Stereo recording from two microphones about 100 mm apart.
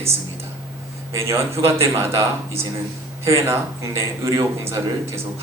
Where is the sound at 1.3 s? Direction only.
30° right (ahead or behind).